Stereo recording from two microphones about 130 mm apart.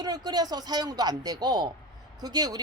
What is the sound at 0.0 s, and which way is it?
A woman's voice, 30° right (ahead or behind).